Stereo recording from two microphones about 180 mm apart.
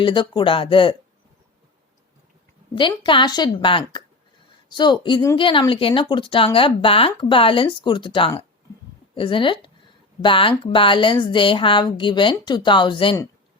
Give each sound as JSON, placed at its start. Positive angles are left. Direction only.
{"t": 0.0, "sound": "speech", "side_deg": 25}
{"t": 2.7, "sound": "speech", "side_deg": 25}